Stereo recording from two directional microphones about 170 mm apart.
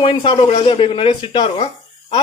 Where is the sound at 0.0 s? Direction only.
30° left (ahead or behind).